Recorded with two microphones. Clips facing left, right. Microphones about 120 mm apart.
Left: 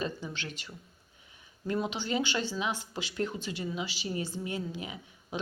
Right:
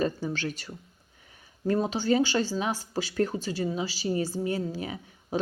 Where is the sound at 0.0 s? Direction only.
45° right (ahead or behind).